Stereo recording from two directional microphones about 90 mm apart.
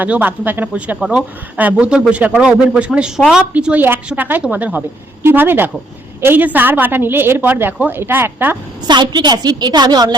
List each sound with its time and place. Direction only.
0.0 s a woman's voice: 20° right (ahead or behind)
0.9 s speech: 5° right (ahead or behind)
1.5 s a woman's voice: 15° right (ahead or behind)
8.9 s a woman's voice: 55° right (ahead or behind)